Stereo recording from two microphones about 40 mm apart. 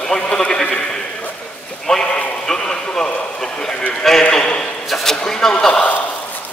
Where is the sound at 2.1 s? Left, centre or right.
Left.